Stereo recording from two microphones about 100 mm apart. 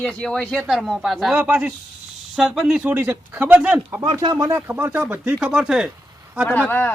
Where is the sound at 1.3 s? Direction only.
15° right (ahead or behind).